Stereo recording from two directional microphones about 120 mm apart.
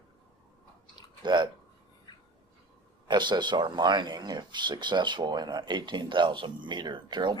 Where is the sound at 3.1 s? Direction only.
40° right (ahead or behind).